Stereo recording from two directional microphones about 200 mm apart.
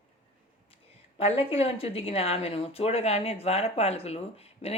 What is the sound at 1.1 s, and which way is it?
Speech, 30° left (ahead or behind).